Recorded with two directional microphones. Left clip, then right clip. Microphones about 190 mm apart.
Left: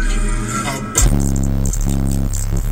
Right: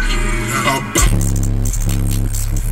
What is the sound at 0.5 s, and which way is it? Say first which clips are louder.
Music: right 6 dB; 50° left (ahead or behind).